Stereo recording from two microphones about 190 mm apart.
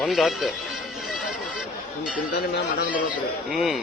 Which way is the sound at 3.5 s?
Centre (ahead or behind).